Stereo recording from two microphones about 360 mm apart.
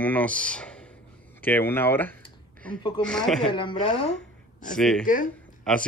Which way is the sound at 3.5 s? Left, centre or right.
Centre.